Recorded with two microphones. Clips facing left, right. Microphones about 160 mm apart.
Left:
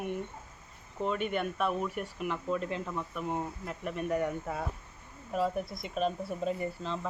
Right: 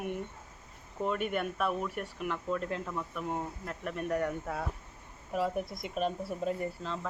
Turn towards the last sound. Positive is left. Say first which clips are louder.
# left 1 dB
turn(degrees=0)  # may be behind; listen again after turning